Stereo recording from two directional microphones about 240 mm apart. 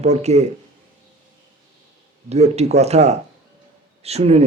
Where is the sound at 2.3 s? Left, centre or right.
Right.